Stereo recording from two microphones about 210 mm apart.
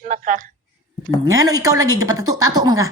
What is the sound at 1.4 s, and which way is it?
Speech, 15° right (ahead or behind).